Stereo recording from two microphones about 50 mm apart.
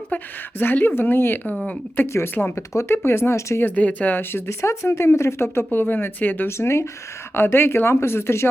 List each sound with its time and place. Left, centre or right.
0.6 s speech: left
2.6 s speech: left
3.6 s speech: left
4.4 s speech: left
6.6 s speech: left
7.3 s speech: left